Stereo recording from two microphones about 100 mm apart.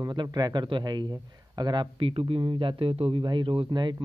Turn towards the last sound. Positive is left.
turn(degrees=-45)  # may be behind; listen again after turning